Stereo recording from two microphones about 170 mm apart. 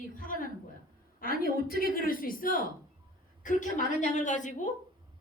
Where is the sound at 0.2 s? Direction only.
55° left (ahead or behind).